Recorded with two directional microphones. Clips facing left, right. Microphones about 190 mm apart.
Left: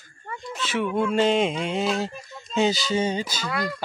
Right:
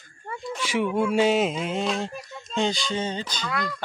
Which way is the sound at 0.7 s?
15° right (ahead or behind).